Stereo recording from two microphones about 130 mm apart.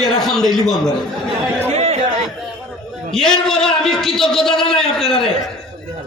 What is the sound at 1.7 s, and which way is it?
Chatter, 60° right (ahead or behind).